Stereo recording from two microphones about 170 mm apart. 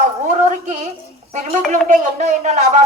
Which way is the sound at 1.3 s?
40° right (ahead or behind).